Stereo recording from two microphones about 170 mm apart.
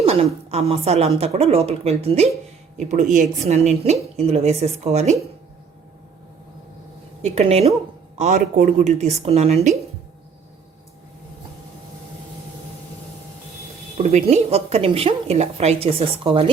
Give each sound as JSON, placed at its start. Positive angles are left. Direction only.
{"t": 0.0, "sound": "a woman's voice", "side_deg": -35}
{"t": 7.2, "sound": "a woman's voice", "side_deg": -40}
{"t": 14.0, "sound": "a woman's voice", "side_deg": -40}